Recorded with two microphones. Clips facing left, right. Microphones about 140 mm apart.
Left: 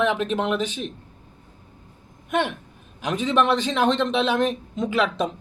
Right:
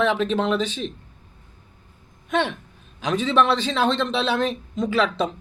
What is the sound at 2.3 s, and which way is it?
A man's voice, 15° left (ahead or behind).